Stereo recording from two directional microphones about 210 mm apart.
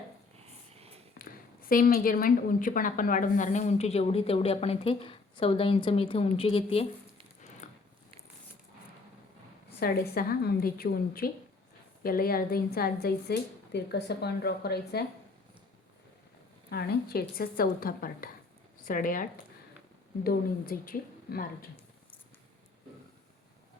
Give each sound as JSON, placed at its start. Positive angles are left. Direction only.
{"t": 1.2, "sound": "a woman's voice", "side_deg": 45}
{"t": 7.6, "sound": "biting", "side_deg": 35}
{"t": 9.8, "sound": "speech", "side_deg": 45}
{"t": 16.6, "sound": "speech", "side_deg": 50}